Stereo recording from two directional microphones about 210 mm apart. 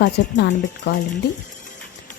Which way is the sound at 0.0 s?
55° left (ahead or behind).